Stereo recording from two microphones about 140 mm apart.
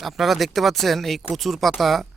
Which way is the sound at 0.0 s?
Centre (ahead or behind).